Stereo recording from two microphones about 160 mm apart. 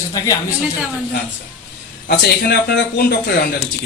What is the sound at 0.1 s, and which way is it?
Speech, 25° left (ahead or behind).